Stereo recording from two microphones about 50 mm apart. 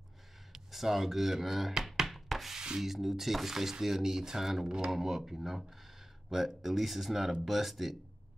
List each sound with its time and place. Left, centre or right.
0.5 s speech: centre
2.0 s rub: centre
2.6 s speech: centre